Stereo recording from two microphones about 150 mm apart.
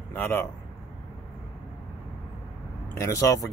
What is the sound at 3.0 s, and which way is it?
Speech, 20° left (ahead or behind).